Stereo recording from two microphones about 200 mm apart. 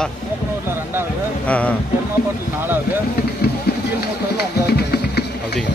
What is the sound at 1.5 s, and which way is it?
Speech, 5° left (ahead or behind).